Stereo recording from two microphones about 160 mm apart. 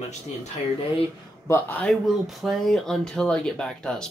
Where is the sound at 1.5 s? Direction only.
10° left (ahead or behind).